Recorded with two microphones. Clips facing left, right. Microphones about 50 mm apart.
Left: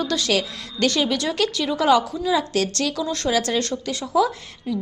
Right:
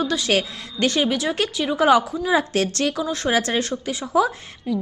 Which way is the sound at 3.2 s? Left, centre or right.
Right.